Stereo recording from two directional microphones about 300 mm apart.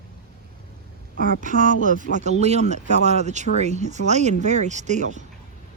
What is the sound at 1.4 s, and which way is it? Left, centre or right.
Speech, right.